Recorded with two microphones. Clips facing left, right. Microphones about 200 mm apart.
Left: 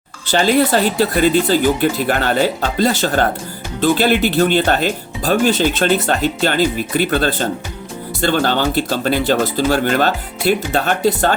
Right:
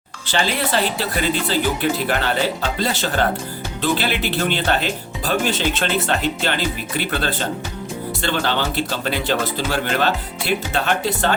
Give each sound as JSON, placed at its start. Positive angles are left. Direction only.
{"t": 0.3, "sound": "speech", "side_deg": 40}